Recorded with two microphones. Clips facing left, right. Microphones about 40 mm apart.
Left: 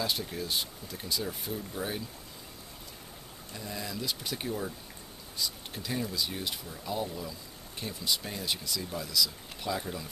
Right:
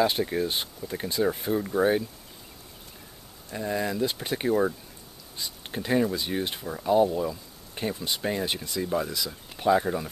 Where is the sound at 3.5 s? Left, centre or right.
Right.